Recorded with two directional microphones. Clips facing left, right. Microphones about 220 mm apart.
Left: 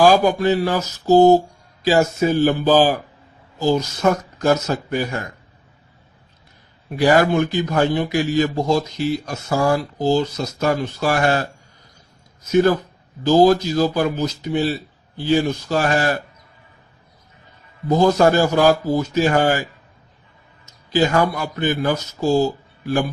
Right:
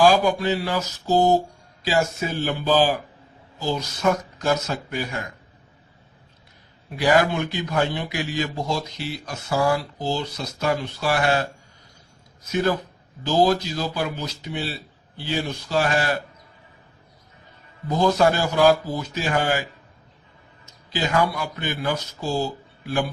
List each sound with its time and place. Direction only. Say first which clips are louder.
0.0 s a man's voice: left 3 dB; 45° left (ahead or behind)
6.9 s a man's voice: left 4 dB; 45° left (ahead or behind)
13.2 s a man's voice: left 6 dB; 45° left (ahead or behind)
17.8 s a man's voice: left 4 dB; 45° left (ahead or behind)
20.9 s a man's voice: left 5 dB; 45° left (ahead or behind)